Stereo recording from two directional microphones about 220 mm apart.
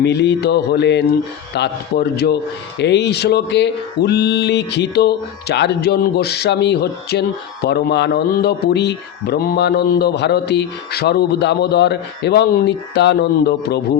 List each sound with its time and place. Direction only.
0.0 s a man's voice: 50° left (ahead or behind)